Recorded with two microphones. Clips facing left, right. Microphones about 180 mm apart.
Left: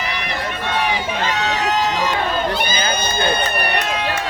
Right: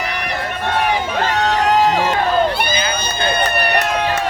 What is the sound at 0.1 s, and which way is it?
Run, 50° right (ahead or behind).